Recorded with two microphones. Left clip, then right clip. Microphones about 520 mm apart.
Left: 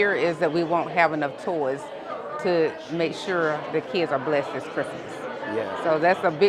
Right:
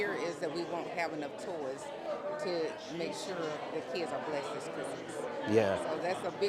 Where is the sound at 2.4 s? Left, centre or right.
Left.